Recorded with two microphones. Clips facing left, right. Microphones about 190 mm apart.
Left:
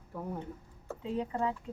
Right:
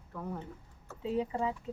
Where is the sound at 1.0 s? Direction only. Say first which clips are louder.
Right 1 dB; 5° right (ahead or behind).